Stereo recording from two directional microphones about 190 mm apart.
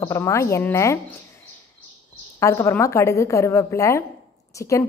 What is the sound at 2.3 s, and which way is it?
A woman's voice, 15° left (ahead or behind).